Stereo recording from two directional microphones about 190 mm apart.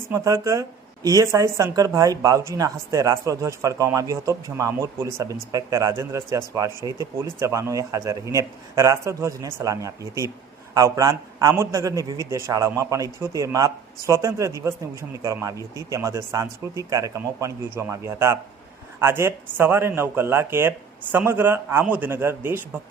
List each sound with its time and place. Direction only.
0.1 s speech: 15° right (ahead or behind)